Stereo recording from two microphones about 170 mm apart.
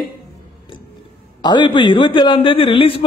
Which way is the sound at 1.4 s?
25° left (ahead or behind).